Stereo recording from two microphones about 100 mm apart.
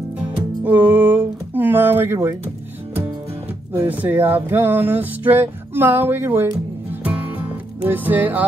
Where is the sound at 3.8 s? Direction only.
15° right (ahead or behind).